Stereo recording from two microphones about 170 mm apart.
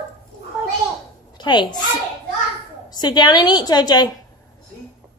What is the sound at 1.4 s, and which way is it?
Speech, 25° left (ahead or behind).